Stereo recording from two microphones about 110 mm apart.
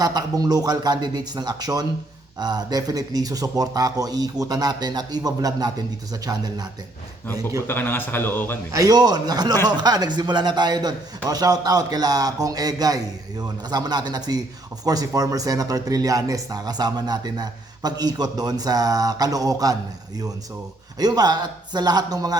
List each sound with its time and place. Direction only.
0.0 s a man's voice: 35° right (ahead or behind)
7.7 s speech: 20° left (ahead or behind)
8.7 s a man's voice: 35° right (ahead or behind)
21.0 s a man's voice: 35° right (ahead or behind)